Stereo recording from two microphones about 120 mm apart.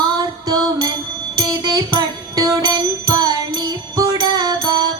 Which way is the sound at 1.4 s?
35° right (ahead or behind).